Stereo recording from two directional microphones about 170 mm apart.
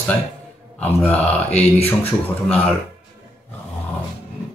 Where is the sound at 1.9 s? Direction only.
10° left (ahead or behind).